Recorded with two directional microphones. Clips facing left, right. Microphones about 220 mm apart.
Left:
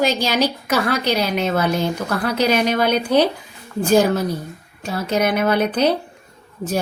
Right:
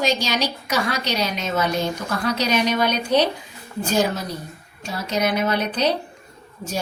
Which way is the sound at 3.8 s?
50° left (ahead or behind).